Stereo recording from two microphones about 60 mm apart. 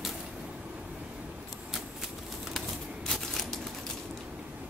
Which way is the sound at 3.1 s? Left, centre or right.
Centre.